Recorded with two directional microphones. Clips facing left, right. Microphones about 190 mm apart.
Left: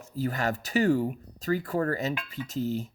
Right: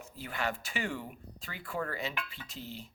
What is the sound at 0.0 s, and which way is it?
Speech, 40° left (ahead or behind).